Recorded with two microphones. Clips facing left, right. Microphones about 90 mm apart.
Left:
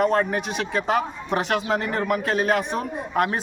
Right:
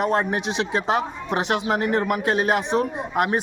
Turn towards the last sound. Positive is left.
turn(degrees=-20)  # may be behind; listen again after turning